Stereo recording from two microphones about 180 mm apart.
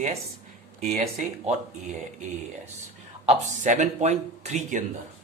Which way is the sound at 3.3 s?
45° right (ahead or behind).